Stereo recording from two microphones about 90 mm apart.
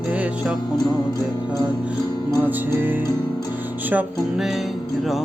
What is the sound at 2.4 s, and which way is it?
Music, 20° right (ahead or behind).